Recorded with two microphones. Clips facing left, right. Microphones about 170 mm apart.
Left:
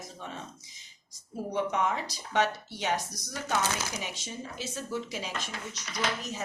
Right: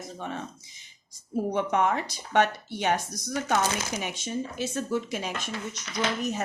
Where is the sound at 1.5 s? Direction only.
55° right (ahead or behind).